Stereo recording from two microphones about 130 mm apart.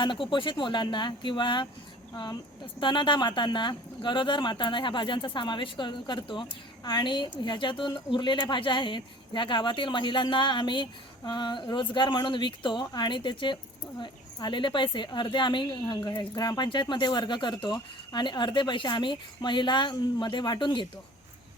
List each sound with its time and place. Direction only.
0.0 s speech: 40° left (ahead or behind)